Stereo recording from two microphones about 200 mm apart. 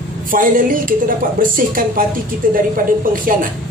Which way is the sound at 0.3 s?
45° right (ahead or behind).